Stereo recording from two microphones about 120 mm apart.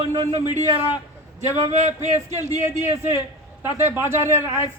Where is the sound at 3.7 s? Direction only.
20° right (ahead or behind).